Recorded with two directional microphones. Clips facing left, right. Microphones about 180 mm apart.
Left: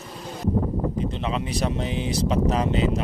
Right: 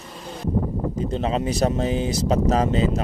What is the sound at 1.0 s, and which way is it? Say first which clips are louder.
Speech: right 4 dB; 40° right (ahead or behind).